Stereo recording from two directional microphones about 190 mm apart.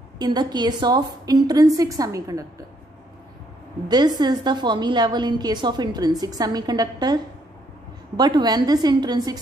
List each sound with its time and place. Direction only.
0.2 s a woman's voice: 20° right (ahead or behind)
3.9 s a woman's voice: 20° right (ahead or behind)
8.2 s a woman's voice: 20° right (ahead or behind)